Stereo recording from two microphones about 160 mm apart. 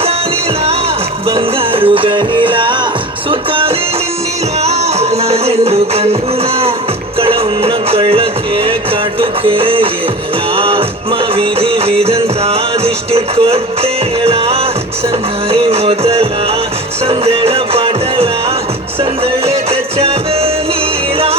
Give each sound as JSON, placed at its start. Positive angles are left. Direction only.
{"t": 1.4, "sound": "music", "side_deg": -35}
{"t": 7.2, "sound": "music", "side_deg": -35}